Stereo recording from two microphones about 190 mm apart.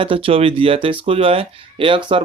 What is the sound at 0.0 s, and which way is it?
Speech, 30° right (ahead or behind).